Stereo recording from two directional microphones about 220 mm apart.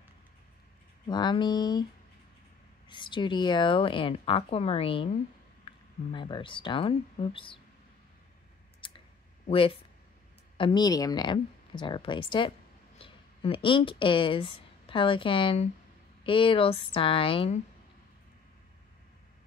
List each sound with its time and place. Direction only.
1.0 s a woman's voice: 20° left (ahead or behind)
2.9 s a woman's voice: 20° left (ahead or behind)
8.8 s clicking: 20° left (ahead or behind)
9.5 s a woman's voice: 25° left (ahead or behind)